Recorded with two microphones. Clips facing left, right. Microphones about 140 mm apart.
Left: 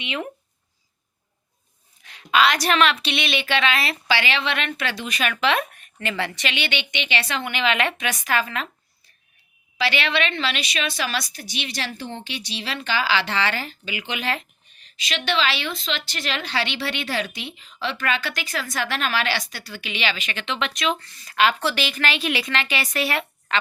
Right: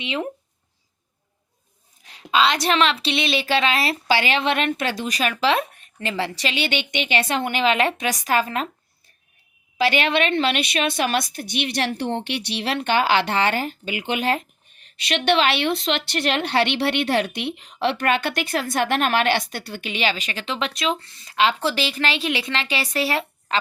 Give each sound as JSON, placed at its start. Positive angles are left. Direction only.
{"t": 0.0, "sound": "speech", "side_deg": -30}
{"t": 2.0, "sound": "a woman's voice", "side_deg": -30}
{"t": 9.7, "sound": "speech", "side_deg": -45}
{"t": 15.0, "sound": "speech", "side_deg": -60}